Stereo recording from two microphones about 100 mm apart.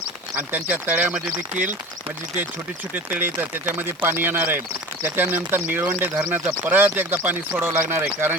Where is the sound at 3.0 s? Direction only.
20° right (ahead or behind).